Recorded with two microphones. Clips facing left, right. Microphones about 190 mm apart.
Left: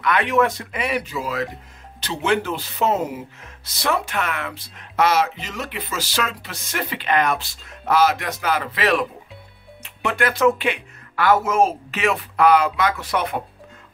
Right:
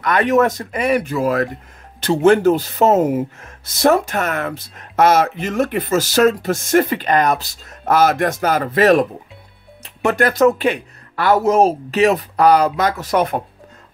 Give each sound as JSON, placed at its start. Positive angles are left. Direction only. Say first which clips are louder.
{"t": 0.0, "sound": "speech", "louder": "right 4 dB", "side_deg": -45}